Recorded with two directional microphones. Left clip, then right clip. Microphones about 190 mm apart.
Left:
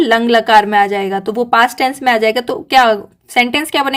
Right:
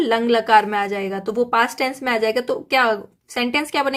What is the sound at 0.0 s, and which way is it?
A woman's voice, 35° left (ahead or behind).